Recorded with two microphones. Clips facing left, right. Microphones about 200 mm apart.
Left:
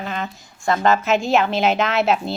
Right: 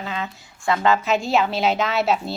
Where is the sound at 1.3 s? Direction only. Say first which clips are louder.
Left 2 dB; centre (ahead or behind).